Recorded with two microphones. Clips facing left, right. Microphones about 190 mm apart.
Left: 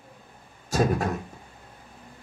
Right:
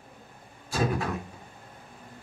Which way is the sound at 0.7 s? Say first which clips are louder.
Left 4 dB; 45° left (ahead or behind).